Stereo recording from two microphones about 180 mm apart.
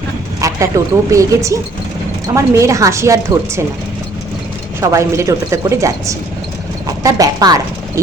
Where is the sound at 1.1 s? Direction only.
15° right (ahead or behind).